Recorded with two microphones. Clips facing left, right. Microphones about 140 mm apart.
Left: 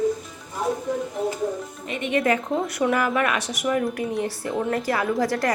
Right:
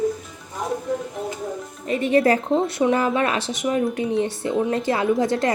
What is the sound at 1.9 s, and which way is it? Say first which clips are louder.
A woman's voice: right 5 dB; 35° right (ahead or behind).